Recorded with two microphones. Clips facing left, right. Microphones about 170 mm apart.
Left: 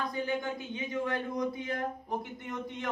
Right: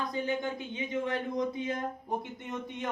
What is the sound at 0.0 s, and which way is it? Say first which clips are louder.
Speech: right 1 dB; 20° right (ahead or behind).